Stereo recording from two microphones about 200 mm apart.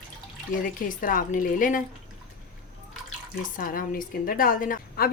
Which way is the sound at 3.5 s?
45° left (ahead or behind).